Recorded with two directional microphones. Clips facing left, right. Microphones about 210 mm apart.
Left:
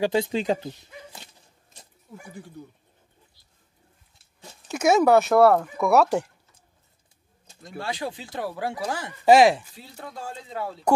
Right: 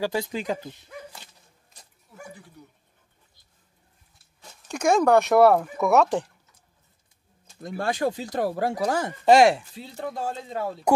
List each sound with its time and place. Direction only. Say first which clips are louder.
0.0 s speech: left 4 dB; 25° left (ahead or behind)
4.6 s speech: left 1 dB; 5° left (ahead or behind)
7.6 s speech: right 6 dB; 50° right (ahead or behind)
9.2 s speech: left 1 dB; centre (ahead or behind)
10.0 s speech: right 6 dB; 45° right (ahead or behind)